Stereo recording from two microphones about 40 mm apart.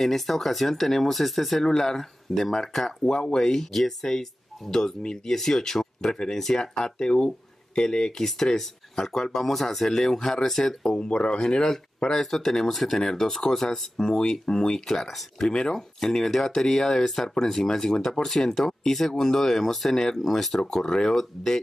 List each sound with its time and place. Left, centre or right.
0.0 s speech: centre
3.1 s speech: left
3.3 s speech: centre
11.1 s speech: left
11.4 s speech: centre
14.9 s speech: centre